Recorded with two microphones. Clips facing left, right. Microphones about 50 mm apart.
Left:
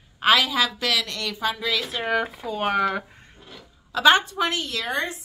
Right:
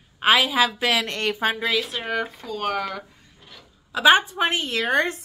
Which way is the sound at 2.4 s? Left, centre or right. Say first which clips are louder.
Left 3 dB; centre.